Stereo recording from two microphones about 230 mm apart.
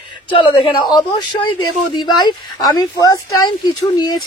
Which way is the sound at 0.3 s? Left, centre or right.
Left.